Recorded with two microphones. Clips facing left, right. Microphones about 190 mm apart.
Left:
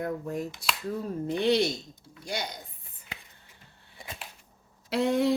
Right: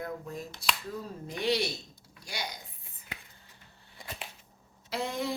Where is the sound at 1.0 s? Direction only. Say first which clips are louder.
Left 6 dB; 60° left (ahead or behind).